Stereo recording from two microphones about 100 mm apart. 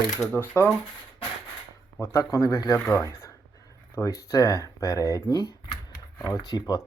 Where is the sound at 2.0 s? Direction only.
30° left (ahead or behind).